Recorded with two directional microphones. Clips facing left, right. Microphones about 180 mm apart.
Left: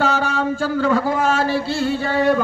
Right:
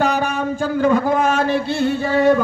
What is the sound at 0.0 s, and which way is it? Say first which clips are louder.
Speech: right 1 dB; 15° right (ahead or behind).